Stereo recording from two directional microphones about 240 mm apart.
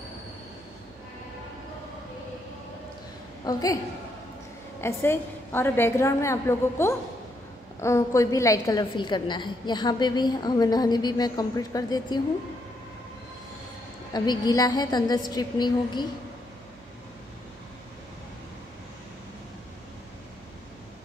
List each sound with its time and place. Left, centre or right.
3.4 s a woman's voice: centre
4.8 s a woman's voice: centre
14.1 s a woman's voice: centre